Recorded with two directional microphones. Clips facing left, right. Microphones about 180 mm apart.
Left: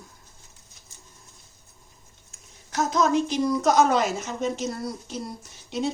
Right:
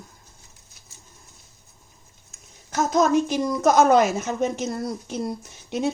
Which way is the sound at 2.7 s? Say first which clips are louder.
Right 3 dB; 45° right (ahead or behind).